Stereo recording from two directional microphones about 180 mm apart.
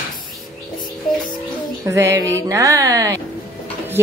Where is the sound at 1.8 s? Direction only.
15° right (ahead or behind).